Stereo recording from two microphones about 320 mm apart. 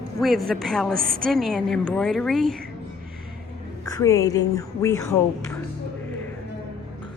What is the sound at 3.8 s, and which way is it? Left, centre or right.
Speech, centre.